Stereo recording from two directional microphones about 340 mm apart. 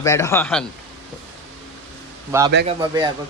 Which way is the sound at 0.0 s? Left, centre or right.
Centre.